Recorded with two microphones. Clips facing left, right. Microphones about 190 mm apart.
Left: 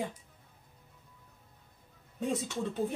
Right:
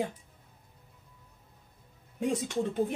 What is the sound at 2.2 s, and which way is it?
Speech, 15° right (ahead or behind).